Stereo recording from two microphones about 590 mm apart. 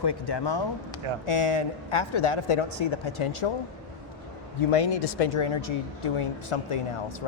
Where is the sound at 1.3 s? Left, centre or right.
Left.